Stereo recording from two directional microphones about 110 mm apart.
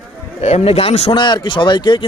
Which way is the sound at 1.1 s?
45° left (ahead or behind).